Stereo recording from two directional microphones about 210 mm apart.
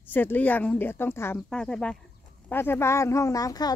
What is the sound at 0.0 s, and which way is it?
Speech, 10° left (ahead or behind).